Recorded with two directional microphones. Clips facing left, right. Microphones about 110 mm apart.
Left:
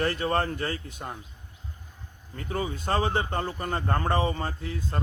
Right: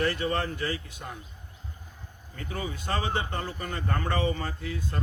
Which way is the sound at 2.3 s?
35° left (ahead or behind).